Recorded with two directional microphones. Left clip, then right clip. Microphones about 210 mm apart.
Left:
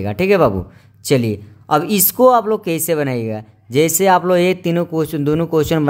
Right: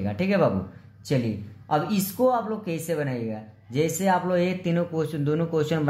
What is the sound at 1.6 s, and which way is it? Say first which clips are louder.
Speech: left 9 dB; 45° left (ahead or behind).